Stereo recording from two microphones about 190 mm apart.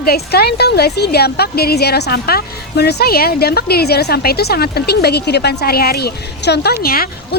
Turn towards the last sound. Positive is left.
turn(degrees=50)  # may be behind; listen again after turning